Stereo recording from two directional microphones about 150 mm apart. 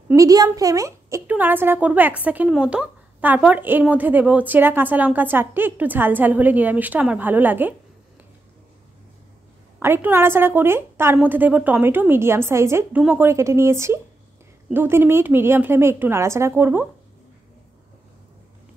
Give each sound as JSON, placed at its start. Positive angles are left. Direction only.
{"t": 0.1, "sound": "a woman's voice", "side_deg": -25}
{"t": 9.8, "sound": "a woman's voice", "side_deg": -15}